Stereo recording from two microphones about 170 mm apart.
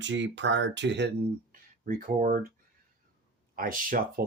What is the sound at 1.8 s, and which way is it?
Speech, 50° right (ahead or behind).